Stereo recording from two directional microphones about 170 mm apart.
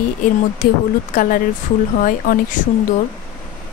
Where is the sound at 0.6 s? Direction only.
55° left (ahead or behind).